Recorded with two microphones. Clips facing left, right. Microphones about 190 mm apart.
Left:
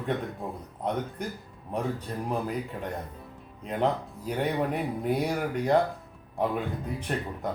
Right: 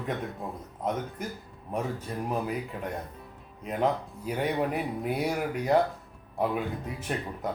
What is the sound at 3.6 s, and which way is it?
Speech, 5° right (ahead or behind).